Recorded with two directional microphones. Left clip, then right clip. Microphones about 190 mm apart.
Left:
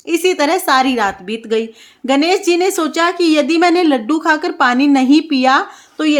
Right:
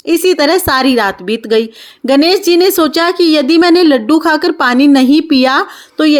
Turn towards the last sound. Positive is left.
turn(degrees=-25)  # may be behind; listen again after turning